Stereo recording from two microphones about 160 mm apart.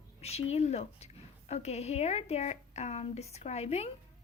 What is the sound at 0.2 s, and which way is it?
A woman's voice, 40° left (ahead or behind).